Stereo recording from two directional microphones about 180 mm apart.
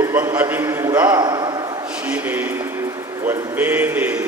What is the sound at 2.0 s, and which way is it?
A man's voice, 10° right (ahead or behind).